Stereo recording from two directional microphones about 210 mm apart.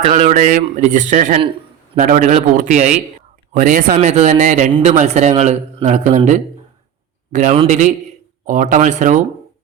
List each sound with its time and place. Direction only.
0.0 s speech: 30° right (ahead or behind)